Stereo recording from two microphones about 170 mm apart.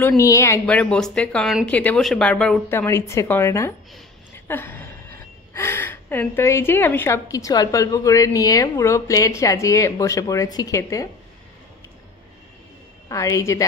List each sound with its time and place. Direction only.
0.2 s a woman's voice: 15° left (ahead or behind)
0.7 s a woman's voice: 5° left (ahead or behind)
13.1 s speech: 20° left (ahead or behind)